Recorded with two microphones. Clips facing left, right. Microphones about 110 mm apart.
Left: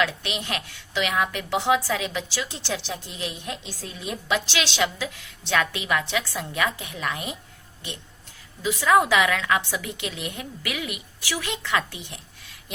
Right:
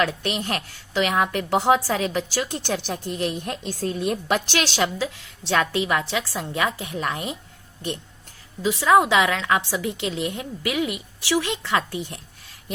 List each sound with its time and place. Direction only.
0.0 s a woman's voice: 40° right (ahead or behind)
8.6 s a woman's voice: 30° right (ahead or behind)